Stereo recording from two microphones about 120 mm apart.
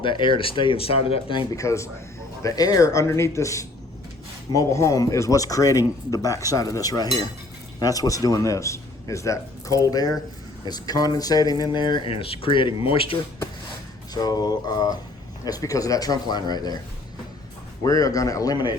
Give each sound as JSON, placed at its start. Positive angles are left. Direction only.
{"t": 0.0, "sound": "speech", "side_deg": 45}
{"t": 1.5, "sound": "a man's voice", "side_deg": 25}
{"t": 14.1, "sound": "speech", "side_deg": 35}
{"t": 17.8, "sound": "speech", "side_deg": 30}